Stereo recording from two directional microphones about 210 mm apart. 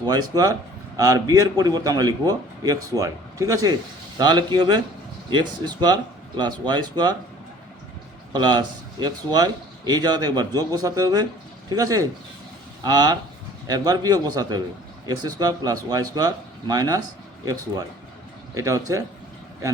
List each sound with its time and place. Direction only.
0.0 s speech: 20° right (ahead or behind)
8.3 s speech: 20° right (ahead or behind)